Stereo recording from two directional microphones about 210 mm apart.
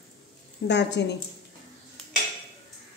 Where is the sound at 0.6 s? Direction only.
55° left (ahead or behind).